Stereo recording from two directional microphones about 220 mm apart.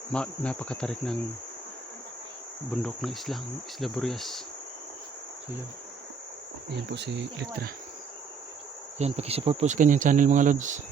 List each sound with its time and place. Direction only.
0.1 s insect: 5° left (ahead or behind)
2.8 s insect: centre (ahead or behind)
6.7 s speech: 50° right (ahead or behind)
9.0 s speech: 30° right (ahead or behind)